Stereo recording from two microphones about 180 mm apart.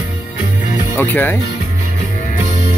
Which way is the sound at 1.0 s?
10° left (ahead or behind).